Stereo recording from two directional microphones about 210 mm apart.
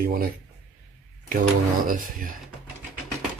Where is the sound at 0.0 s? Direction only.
45° right (ahead or behind).